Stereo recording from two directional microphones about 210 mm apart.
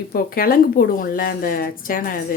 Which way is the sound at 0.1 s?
45° left (ahead or behind).